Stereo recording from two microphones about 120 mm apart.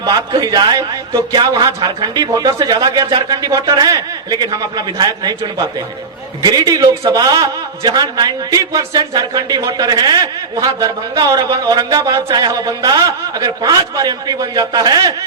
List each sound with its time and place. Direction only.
0.0 s a man's voice: 35° right (ahead or behind)